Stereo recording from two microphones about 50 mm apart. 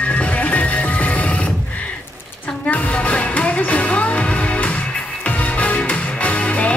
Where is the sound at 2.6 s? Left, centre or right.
Left.